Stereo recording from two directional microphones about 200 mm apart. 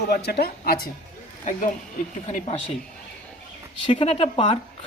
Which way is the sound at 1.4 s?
40° left (ahead or behind).